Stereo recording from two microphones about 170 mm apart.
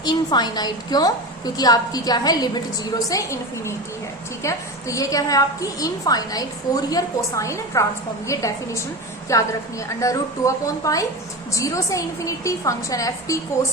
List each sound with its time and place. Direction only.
0.0 s a woman's voice: 25° left (ahead or behind)